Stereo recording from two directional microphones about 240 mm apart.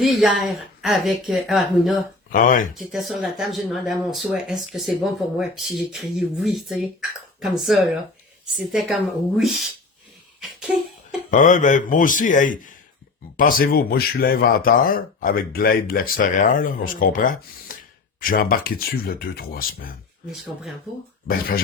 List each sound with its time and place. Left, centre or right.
0.0 s speech: centre
2.3 s speech: left
2.7 s speech: centre
11.3 s speech: left